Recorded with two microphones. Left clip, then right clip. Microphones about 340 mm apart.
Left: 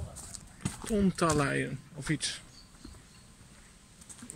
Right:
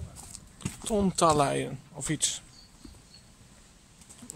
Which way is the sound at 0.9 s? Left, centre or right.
Centre.